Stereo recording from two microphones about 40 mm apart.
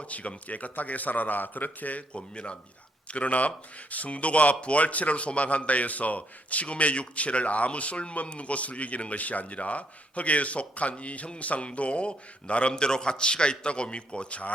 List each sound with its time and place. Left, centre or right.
0.0 s speech: left
2.1 s a man's voice: left